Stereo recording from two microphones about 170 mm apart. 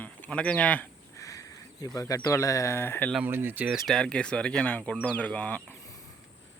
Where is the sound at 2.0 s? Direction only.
20° left (ahead or behind).